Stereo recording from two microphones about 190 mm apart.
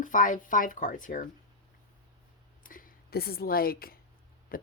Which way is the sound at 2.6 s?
50° left (ahead or behind).